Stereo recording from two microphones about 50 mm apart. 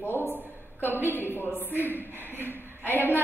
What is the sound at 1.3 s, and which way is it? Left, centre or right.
A woman's voice, left.